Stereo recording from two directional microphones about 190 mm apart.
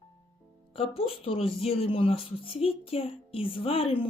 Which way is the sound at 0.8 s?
30° left (ahead or behind).